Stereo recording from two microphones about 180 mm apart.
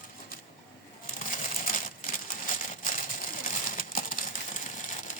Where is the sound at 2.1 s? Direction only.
50° left (ahead or behind).